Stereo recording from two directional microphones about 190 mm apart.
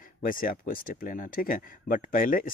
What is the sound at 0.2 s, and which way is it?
Speech, 45° left (ahead or behind).